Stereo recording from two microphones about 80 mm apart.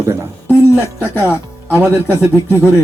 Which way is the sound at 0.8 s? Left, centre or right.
Left.